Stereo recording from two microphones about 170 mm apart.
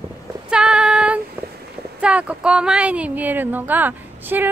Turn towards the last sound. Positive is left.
turn(degrees=-10)  # may be behind; listen again after turning